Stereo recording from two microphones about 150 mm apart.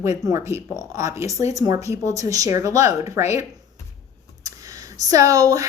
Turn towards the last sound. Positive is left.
turn(degrees=-25)  # may be behind; listen again after turning